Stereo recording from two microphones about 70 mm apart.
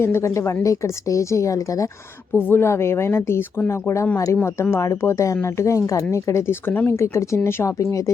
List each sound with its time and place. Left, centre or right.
0.0 s speech: left
0.3 s speech: left
2.3 s speech: left
4.4 s speech: left
4.8 s speech: left
6.7 s speech: left
6.9 s speech: left